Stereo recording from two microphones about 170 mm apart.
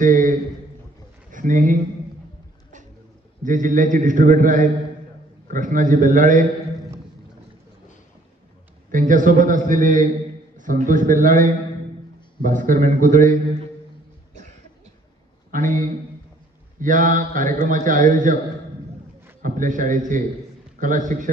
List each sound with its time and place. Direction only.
0.0 s a man's voice: 50° right (ahead or behind)
3.4 s a man's voice: 50° right (ahead or behind)
8.9 s a man's voice: 50° right (ahead or behind)
15.5 s a man's voice: 50° right (ahead or behind)
19.4 s a man's voice: 50° right (ahead or behind)